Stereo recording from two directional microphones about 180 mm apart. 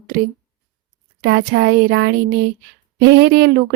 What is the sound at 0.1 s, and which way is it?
Speech, 50° right (ahead or behind).